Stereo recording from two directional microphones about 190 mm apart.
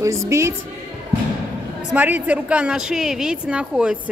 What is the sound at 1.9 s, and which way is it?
A woman's voice, 10° right (ahead or behind).